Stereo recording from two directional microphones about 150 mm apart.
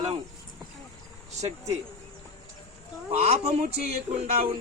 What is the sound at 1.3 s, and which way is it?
Music, 50° right (ahead or behind).